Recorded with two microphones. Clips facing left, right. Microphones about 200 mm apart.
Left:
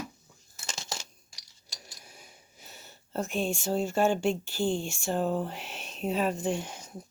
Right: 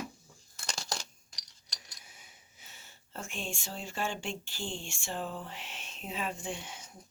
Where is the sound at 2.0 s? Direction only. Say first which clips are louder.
Left 6 dB; 40° left (ahead or behind).